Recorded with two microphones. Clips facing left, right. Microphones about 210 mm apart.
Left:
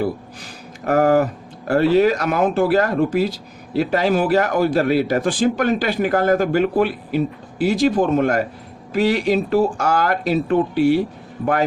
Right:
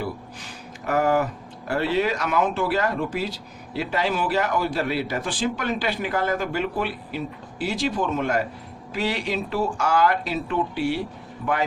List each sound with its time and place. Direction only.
0.9 s speech: 45° left (ahead or behind)